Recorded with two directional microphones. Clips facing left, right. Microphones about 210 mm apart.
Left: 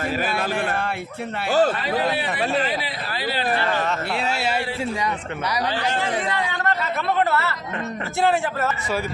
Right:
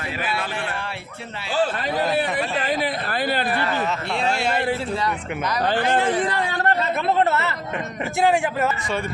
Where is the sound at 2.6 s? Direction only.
45° right (ahead or behind).